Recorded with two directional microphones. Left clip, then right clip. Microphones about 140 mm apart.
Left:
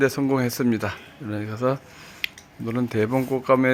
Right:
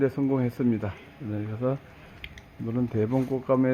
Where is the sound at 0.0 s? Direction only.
15° left (ahead or behind).